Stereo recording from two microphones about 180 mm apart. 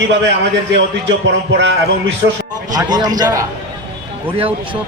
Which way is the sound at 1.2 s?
75° right (ahead or behind).